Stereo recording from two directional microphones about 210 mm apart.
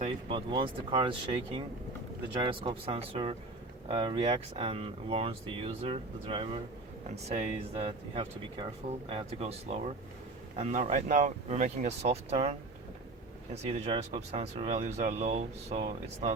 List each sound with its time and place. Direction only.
0.0 s speech: 25° right (ahead or behind)